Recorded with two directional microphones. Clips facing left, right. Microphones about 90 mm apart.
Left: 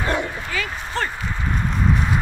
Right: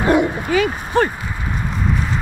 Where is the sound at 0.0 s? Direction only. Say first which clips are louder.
Right 8 dB; 20° right (ahead or behind).